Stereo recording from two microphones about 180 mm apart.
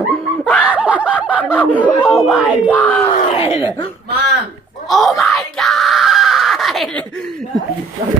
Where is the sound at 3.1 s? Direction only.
30° left (ahead or behind).